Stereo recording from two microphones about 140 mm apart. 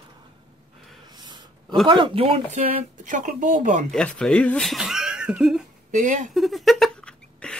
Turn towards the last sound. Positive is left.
turn(degrees=5)  # may be behind; listen again after turning